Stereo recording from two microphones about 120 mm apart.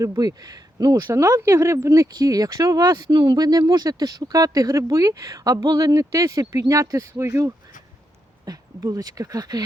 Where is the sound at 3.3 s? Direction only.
30° right (ahead or behind).